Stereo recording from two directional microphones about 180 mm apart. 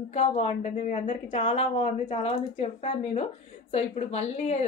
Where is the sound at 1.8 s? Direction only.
40° left (ahead or behind).